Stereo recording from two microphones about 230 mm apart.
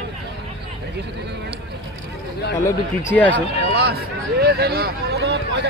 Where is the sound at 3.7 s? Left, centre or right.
Right.